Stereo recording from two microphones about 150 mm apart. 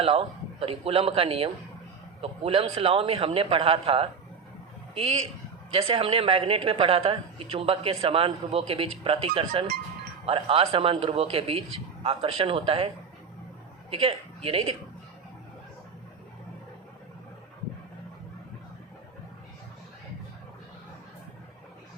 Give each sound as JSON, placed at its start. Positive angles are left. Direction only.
{"t": 0.0, "sound": "a woman's voice", "side_deg": -40}
{"t": 5.7, "sound": "a woman's voice", "side_deg": -40}
{"t": 13.9, "sound": "a woman's voice", "side_deg": -40}